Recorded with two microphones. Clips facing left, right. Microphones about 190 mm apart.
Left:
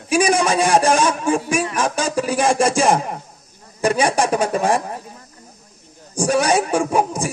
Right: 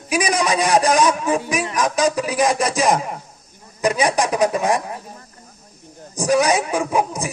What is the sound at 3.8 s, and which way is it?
Speech, 30° left (ahead or behind).